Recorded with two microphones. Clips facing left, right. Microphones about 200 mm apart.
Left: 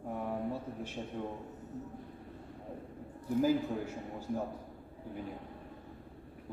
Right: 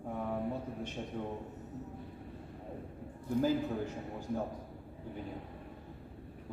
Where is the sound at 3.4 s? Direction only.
10° left (ahead or behind).